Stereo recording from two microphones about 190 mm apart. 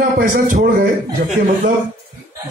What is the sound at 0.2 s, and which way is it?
Speech, 45° right (ahead or behind).